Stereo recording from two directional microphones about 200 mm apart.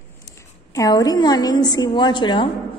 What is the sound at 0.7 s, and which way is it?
A woman's voice, 20° left (ahead or behind).